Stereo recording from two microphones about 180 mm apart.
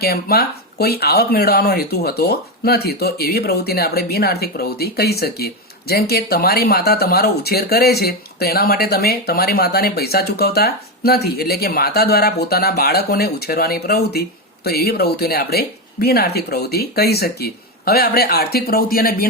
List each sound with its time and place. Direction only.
0.0 s speech: 60° left (ahead or behind)